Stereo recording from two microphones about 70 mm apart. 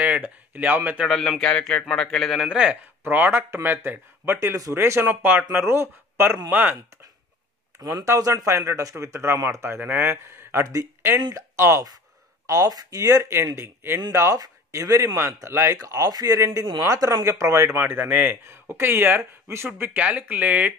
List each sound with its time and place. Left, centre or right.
0.0 s speech: right
1.0 s speech: centre
3.1 s speech: right
6.5 s speech: right
7.8 s speech: right
9.8 s speech: right
12.4 s speech: right
14.3 s speech: right
15.8 s speech: right
16.4 s speech: right
17.7 s speech: right
18.4 s speech: right
20.0 s speech: right